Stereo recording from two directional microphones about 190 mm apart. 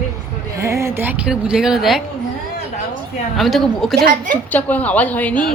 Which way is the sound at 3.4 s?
Centre (ahead or behind).